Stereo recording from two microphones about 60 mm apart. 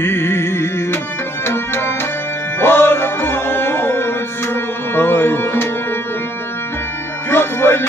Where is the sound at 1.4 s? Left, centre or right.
Left.